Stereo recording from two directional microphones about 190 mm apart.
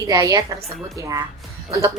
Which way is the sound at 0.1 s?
20° right (ahead or behind).